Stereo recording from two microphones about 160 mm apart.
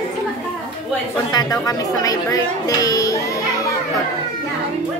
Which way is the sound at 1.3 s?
25° left (ahead or behind).